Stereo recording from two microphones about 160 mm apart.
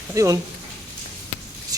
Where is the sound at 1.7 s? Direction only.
20° right (ahead or behind).